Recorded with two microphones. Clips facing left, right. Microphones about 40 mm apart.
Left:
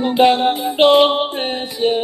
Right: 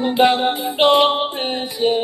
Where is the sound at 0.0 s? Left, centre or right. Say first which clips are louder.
Left 2 dB; centre.